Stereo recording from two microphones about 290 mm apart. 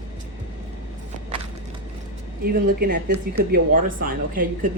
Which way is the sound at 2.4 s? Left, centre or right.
Right.